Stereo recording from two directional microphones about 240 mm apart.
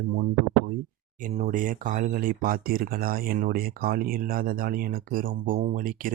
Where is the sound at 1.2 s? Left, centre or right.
Right.